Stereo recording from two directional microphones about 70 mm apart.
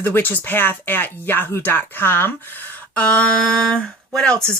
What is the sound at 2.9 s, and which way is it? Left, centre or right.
Speech, centre.